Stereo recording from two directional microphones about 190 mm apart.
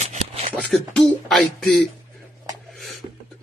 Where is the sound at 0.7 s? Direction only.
Centre (ahead or behind).